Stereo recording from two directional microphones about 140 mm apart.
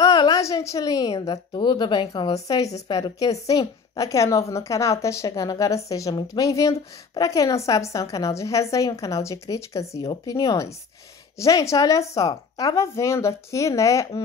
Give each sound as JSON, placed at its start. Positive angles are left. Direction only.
{"t": 0.0, "sound": "a woman's voice", "side_deg": 30}